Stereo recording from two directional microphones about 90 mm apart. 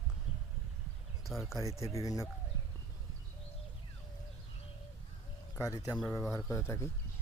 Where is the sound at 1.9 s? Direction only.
40° left (ahead or behind).